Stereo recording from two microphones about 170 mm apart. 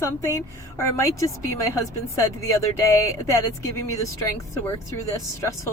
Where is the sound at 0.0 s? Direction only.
20° left (ahead or behind).